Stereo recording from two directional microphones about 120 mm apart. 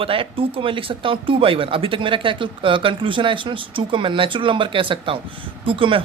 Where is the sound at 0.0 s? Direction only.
50° right (ahead or behind).